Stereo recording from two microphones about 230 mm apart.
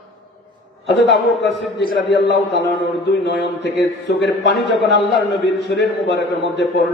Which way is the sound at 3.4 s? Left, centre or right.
Left.